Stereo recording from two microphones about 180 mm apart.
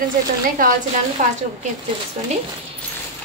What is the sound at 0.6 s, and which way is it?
Speech, 50° right (ahead or behind).